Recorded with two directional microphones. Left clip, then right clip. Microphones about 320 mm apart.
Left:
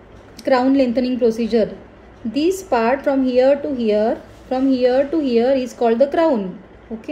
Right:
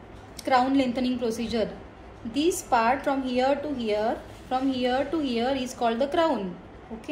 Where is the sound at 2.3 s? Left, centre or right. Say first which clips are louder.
Left 7 dB; left.